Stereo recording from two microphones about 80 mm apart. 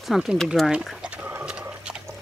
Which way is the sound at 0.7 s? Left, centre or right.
Centre.